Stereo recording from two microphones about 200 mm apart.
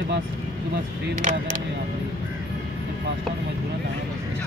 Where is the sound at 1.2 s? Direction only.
40° right (ahead or behind).